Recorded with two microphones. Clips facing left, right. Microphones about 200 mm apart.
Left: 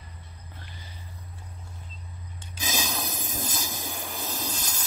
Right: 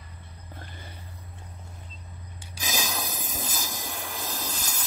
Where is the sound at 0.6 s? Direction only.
55° right (ahead or behind).